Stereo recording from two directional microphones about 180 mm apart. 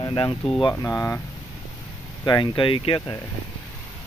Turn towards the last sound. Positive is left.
turn(degrees=30)  # may be behind; listen again after turning